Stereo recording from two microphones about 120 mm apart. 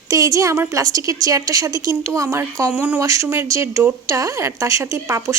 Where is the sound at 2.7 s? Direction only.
10° right (ahead or behind).